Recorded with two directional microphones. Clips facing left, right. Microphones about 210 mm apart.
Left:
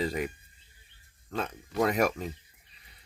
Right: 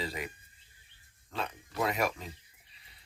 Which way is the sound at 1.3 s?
45° left (ahead or behind).